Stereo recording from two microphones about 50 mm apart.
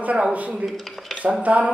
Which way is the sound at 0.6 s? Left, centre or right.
Centre.